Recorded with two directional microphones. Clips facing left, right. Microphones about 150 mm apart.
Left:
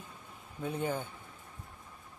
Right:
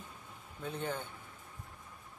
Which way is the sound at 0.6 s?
10° left (ahead or behind).